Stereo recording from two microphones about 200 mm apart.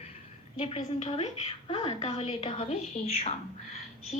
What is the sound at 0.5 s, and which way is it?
A woman's voice, 30° left (ahead or behind).